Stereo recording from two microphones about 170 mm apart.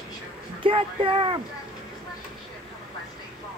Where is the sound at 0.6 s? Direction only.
30° right (ahead or behind).